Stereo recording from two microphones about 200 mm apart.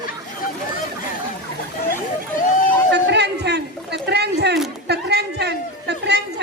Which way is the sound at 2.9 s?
60° right (ahead or behind).